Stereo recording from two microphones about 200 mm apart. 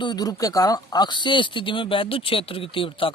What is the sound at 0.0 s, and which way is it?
Speech, 20° left (ahead or behind).